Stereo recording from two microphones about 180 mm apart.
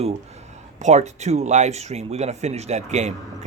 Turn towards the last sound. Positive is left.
turn(degrees=-40)  # may be behind; listen again after turning